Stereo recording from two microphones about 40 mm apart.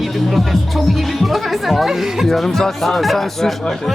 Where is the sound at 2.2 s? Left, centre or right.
Centre.